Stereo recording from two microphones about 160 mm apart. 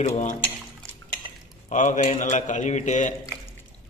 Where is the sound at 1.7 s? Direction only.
50° left (ahead or behind).